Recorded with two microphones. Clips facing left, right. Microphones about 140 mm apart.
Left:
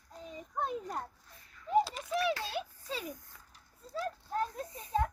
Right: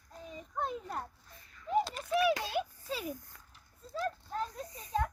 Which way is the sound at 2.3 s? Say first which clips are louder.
Right 3 dB; 15° right (ahead or behind).